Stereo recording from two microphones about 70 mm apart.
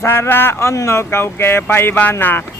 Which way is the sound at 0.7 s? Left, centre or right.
Left.